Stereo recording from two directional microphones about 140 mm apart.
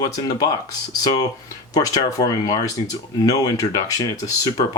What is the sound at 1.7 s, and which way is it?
Speech, 25° left (ahead or behind).